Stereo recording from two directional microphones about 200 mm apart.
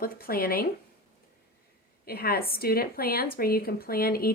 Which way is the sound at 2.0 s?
50° left (ahead or behind).